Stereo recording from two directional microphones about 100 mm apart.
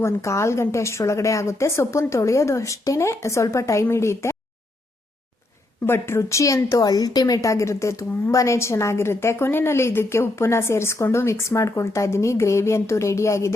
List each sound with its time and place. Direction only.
0.0 s a woman's voice: 30° left (ahead or behind)
5.8 s a woman's voice: 25° left (ahead or behind)